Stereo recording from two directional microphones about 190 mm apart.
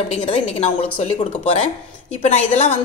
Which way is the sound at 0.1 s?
35° left (ahead or behind).